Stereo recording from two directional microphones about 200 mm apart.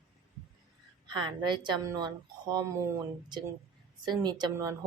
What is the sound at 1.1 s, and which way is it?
Speech, 25° right (ahead or behind).